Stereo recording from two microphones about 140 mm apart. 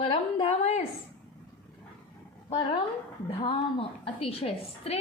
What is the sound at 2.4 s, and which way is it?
Speech, 45° left (ahead or behind).